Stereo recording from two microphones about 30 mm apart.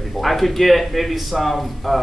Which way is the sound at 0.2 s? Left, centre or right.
Centre.